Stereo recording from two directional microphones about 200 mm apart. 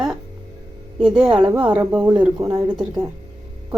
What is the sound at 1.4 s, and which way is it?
Speech, 20° right (ahead or behind).